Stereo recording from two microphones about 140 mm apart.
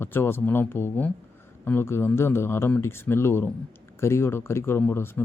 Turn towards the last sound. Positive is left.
turn(degrees=15)  # may be behind; listen again after turning